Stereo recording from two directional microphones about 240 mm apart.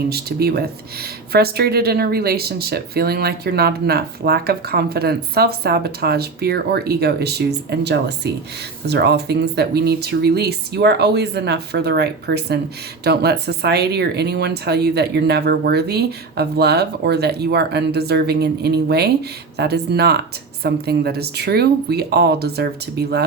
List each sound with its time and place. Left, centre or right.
0.1 s speech: right